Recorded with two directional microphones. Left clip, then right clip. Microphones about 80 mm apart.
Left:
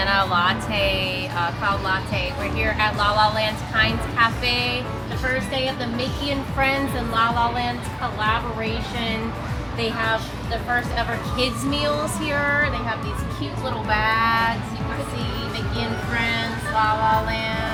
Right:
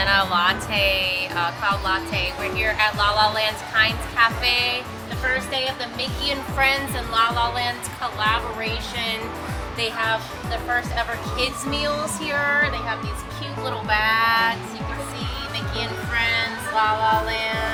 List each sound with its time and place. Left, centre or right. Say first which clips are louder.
0.0 s speech: right 1 dB; centre
6.2 s a woman's voice: right 2 dB; right
9.8 s speech: even; centre
15.8 s music: right 1 dB; centre